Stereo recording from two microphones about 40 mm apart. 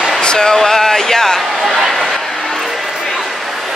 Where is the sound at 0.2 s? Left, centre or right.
Left; by 2.1 s centre.